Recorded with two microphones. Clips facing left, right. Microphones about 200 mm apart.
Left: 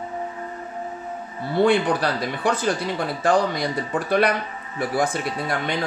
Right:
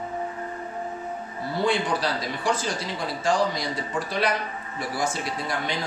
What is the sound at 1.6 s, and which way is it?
Speech, 60° left (ahead or behind).